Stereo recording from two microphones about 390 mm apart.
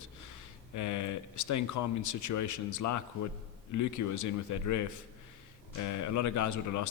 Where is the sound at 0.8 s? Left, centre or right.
Left.